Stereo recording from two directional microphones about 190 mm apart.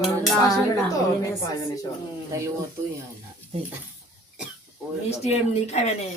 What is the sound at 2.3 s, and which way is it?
Speech, 15° right (ahead or behind).